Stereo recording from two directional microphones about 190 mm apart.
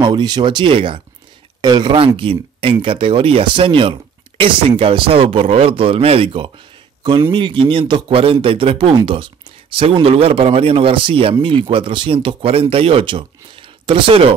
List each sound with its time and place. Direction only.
0.0 s speech: 20° right (ahead or behind)